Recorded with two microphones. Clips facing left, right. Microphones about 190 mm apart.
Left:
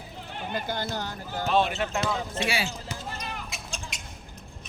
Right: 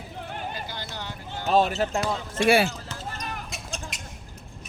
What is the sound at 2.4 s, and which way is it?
Speech, 55° right (ahead or behind).